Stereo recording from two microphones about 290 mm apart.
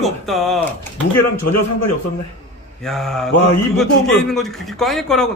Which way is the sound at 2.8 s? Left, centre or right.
Centre.